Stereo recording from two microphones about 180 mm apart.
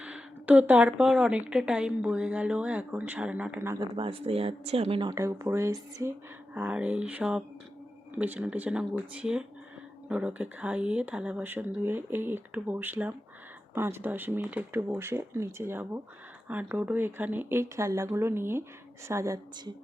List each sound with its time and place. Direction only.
0.0 s speech: 10° right (ahead or behind)
3.8 s speech: 30° right (ahead or behind)